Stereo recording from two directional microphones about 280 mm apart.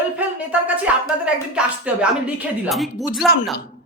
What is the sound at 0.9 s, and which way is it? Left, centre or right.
Speech, centre.